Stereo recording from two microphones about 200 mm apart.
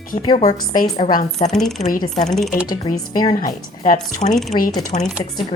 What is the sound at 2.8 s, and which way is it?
Speech, 20° left (ahead or behind).